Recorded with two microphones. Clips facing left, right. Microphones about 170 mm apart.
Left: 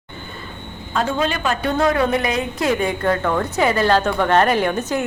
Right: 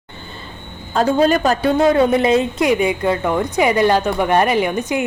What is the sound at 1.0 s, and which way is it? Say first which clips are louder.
Speech: right 7 dB; 40° right (ahead or behind).